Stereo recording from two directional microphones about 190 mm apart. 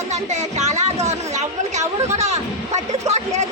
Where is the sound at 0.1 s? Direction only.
35° right (ahead or behind).